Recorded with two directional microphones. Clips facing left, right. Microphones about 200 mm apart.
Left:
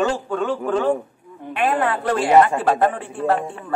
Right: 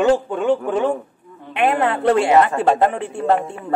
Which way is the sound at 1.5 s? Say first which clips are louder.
Right 2 dB; 25° right (ahead or behind).